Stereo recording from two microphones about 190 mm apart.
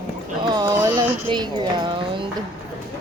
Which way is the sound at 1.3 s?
25° right (ahead or behind).